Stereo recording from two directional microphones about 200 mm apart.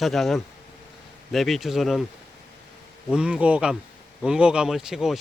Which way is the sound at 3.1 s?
5° right (ahead or behind).